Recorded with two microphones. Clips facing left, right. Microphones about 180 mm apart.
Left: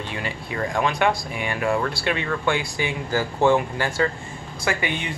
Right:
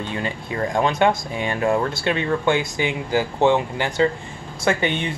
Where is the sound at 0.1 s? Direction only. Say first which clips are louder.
Right 3 dB; 25° right (ahead or behind).